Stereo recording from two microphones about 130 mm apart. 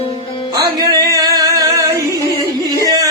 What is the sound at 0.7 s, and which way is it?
Singing, 25° right (ahead or behind).